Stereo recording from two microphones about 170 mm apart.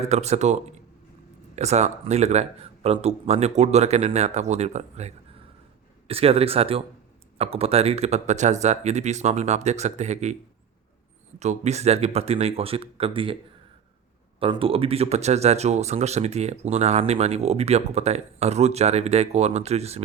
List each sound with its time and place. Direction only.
0.1 s speech: 40° right (ahead or behind)
11.3 s speech: 40° right (ahead or behind)